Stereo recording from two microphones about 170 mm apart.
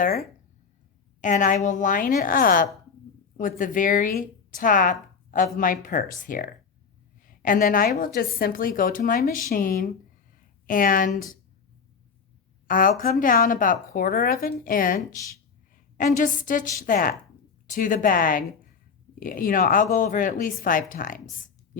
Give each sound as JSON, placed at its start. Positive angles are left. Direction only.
{"t": 1.2, "sound": "a woman's voice", "side_deg": 50}
{"t": 12.6, "sound": "a woman's voice", "side_deg": 55}